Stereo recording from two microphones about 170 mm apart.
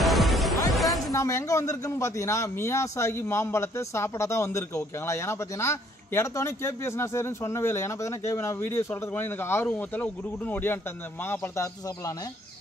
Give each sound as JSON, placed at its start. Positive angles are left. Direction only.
{"t": 0.0, "sound": "music", "side_deg": 0}
{"t": 0.7, "sound": "a sound", "side_deg": 0}
{"t": 1.1, "sound": "a man's voice", "side_deg": 20}